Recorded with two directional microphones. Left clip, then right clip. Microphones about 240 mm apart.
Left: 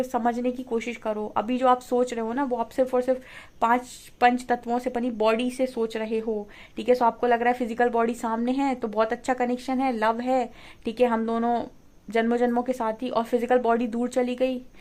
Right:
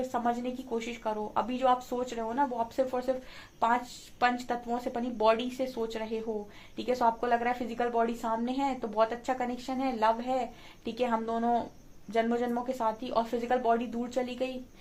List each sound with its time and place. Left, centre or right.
0.1 s a woman's voice: left
4.2 s a woman's voice: left